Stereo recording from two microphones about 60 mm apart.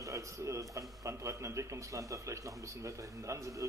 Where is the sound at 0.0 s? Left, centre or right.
Right.